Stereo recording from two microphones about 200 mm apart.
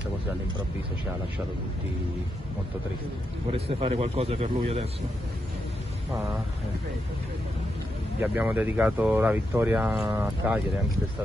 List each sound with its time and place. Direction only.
3.5 s a man's voice: 30° right (ahead or behind)
8.2 s speech: 10° right (ahead or behind)